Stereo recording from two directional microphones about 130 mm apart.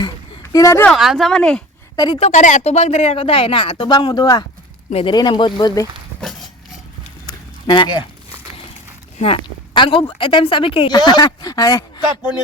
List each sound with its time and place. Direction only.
0.5 s speech: 25° left (ahead or behind)
0.9 s speech: centre (ahead or behind)
2.1 s speech: 60° left (ahead or behind); by 4.4 s 30° left (ahead or behind)
4.9 s speech: 50° left (ahead or behind)
5.1 s speech: 35° left (ahead or behind)
6.1 s a sound: centre (ahead or behind)
7.3 s a sound: 35° left (ahead or behind)
9.1 s speech: 45° left (ahead or behind)